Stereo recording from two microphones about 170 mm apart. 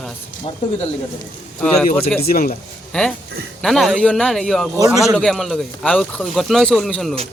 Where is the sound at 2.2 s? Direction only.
65° left (ahead or behind).